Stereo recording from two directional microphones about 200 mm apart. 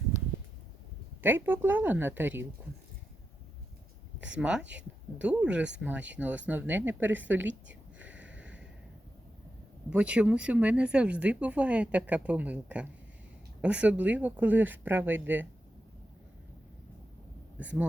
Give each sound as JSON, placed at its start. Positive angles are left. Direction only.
{"t": 1.2, "sound": "speech", "side_deg": -10}
{"t": 4.4, "sound": "speech", "side_deg": -5}
{"t": 7.4, "sound": "a sound", "side_deg": -65}
{"t": 8.0, "sound": "a sound", "side_deg": -5}
{"t": 9.9, "sound": "speech", "side_deg": -5}
{"t": 17.6, "sound": "speech", "side_deg": -5}